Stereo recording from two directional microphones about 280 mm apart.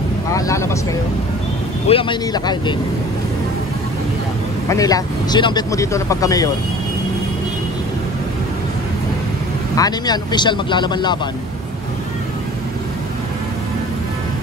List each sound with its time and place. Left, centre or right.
0.3 s vehicle: centre
1.9 s speech: centre
4.6 s speech: centre
9.8 s speech: centre